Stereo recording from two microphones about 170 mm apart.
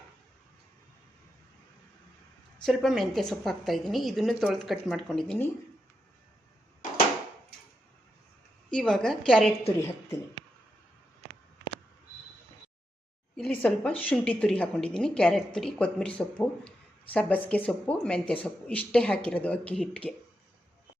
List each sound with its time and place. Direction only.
2.6 s a woman's voice: centre (ahead or behind)
8.7 s a woman's voice: 5° left (ahead or behind)
9.7 s a woman's voice: 15° left (ahead or behind)
13.3 s a woman's voice: 5° left (ahead or behind)